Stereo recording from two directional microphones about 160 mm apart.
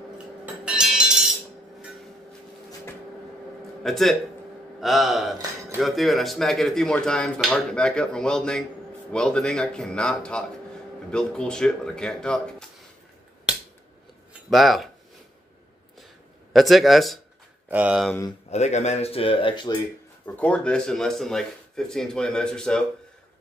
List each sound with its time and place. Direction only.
0.7 s music: 5° right (ahead or behind)
3.8 s speech: centre (ahead or behind)
14.5 s speech: centre (ahead or behind)
16.5 s speech: centre (ahead or behind)
18.5 s speech: 45° left (ahead or behind); by 19.8 s 30° left (ahead or behind)
20.2 s speech: 10° left (ahead or behind)